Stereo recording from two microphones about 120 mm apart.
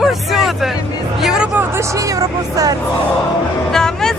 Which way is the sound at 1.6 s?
25° right (ahead or behind).